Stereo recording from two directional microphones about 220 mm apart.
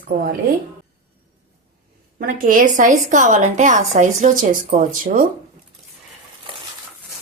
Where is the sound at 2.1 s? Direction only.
40° right (ahead or behind).